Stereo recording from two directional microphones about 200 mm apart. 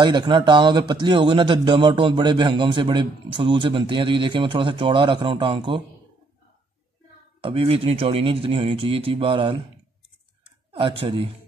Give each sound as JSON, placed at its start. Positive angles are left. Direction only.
{"t": 0.0, "sound": "a man's voice", "side_deg": -20}
{"t": 7.4, "sound": "a man's voice", "side_deg": -25}
{"t": 10.7, "sound": "speech", "side_deg": -25}